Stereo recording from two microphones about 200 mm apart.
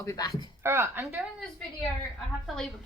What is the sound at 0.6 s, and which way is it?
Speech, 15° right (ahead or behind).